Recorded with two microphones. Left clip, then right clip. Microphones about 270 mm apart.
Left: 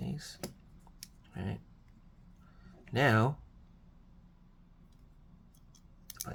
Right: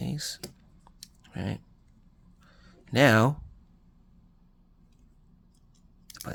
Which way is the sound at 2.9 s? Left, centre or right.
Right.